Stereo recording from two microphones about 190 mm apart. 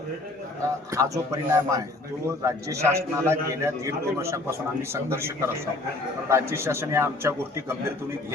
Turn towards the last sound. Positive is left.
turn(degrees=-15)  # may be behind; listen again after turning